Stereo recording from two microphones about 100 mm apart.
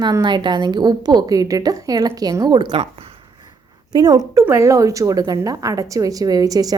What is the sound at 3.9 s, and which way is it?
Speech, 40° right (ahead or behind).